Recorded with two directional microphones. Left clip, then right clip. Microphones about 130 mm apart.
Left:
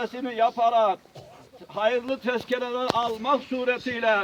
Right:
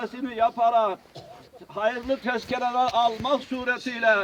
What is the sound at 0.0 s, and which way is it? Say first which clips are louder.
Speech: left 1 dB; 30° left (ahead or behind).